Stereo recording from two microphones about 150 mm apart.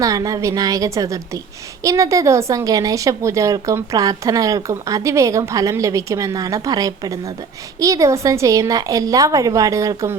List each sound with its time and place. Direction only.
0.0 s a woman's voice: 20° right (ahead or behind)